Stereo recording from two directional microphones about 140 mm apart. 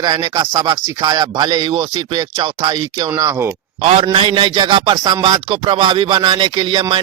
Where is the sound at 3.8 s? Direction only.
45° right (ahead or behind).